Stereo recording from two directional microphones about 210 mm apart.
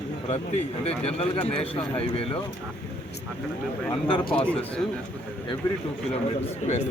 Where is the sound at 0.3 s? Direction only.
30° left (ahead or behind).